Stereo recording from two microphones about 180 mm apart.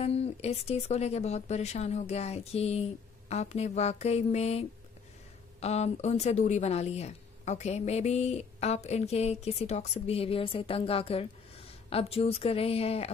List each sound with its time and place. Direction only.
0.0 s speech: 35° left (ahead or behind)